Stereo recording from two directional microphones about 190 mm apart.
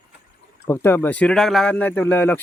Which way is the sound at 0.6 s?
10° left (ahead or behind).